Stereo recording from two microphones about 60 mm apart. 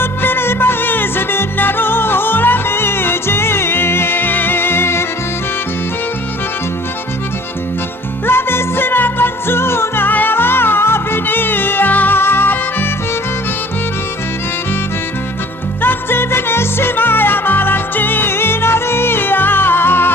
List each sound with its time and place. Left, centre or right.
0.0 s music: left
8.3 s music: left
15.8 s music: left